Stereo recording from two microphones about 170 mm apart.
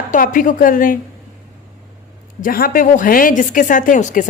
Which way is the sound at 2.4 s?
60° left (ahead or behind).